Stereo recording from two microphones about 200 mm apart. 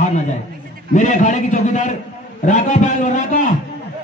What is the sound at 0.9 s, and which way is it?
A man's voice, 40° left (ahead or behind).